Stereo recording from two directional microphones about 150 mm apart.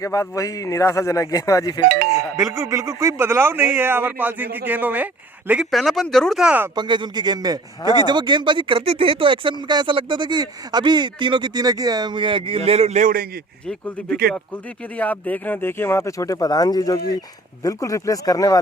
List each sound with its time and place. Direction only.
0.0 s speech: 20° left (ahead or behind)
2.1 s speech: 20° right (ahead or behind)
6.7 s a man's voice: 30° right (ahead or behind); by 13.2 s 60° right (ahead or behind)
13.7 s speech: 5° left (ahead or behind); by 18.6 s 25° left (ahead or behind)